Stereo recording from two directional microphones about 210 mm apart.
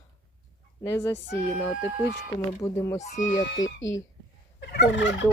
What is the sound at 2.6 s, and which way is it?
Speech, 15° left (ahead or behind).